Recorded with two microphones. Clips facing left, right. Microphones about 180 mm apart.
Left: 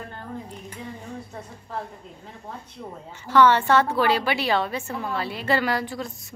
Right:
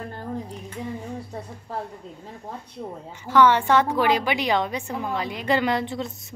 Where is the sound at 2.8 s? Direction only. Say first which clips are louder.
Right 4 dB; 35° right (ahead or behind).